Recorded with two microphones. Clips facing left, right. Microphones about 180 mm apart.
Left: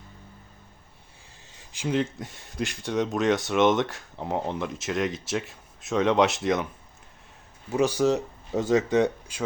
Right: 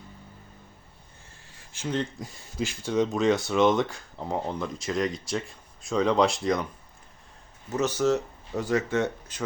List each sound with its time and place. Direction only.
1.5 s speech: 15° left (ahead or behind)
7.7 s speech: 10° left (ahead or behind)